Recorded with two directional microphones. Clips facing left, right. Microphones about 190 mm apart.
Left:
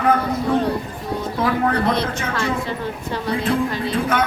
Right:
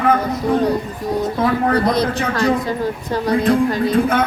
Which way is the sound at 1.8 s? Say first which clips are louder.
Right 4 dB; 40° right (ahead or behind).